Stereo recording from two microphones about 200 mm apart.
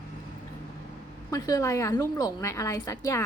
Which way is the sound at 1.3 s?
15° left (ahead or behind).